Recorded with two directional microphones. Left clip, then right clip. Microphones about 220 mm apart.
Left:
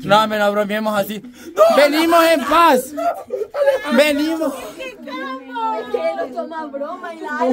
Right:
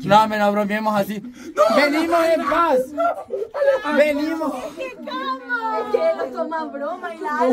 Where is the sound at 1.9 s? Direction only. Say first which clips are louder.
Left 4 dB; 40° left (ahead or behind).